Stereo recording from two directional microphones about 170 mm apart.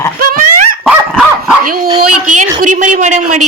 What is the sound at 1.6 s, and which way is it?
Speech, 60° right (ahead or behind).